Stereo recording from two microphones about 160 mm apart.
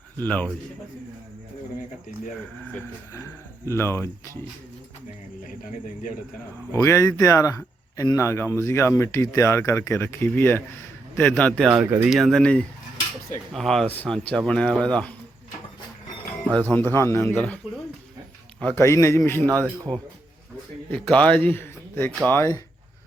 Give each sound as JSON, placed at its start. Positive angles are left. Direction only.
{"t": 0.2, "sound": "speech", "side_deg": 10}
{"t": 2.7, "sound": "speech", "side_deg": 10}
{"t": 6.7, "sound": "speech", "side_deg": 20}
{"t": 11.7, "sound": "speech", "side_deg": -10}
{"t": 12.1, "sound": "speech", "side_deg": 0}
{"t": 16.5, "sound": "speech", "side_deg": 10}
{"t": 18.6, "sound": "speech", "side_deg": 15}
{"t": 20.9, "sound": "speech", "side_deg": 10}